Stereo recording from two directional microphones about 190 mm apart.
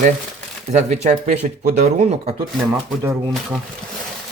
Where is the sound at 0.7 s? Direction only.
35° right (ahead or behind).